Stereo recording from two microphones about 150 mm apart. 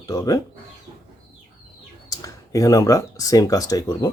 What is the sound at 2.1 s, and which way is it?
Speech, 25° left (ahead or behind).